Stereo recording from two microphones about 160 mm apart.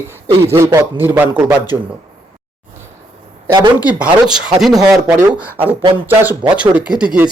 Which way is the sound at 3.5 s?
25° right (ahead or behind).